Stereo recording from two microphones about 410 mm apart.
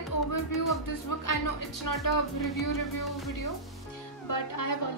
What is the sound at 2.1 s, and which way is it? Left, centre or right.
Speech, left.